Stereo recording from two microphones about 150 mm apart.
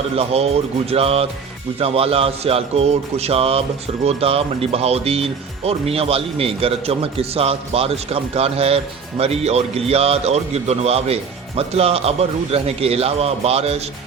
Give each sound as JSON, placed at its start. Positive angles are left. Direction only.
{"t": 0.2, "sound": "speech", "side_deg": -45}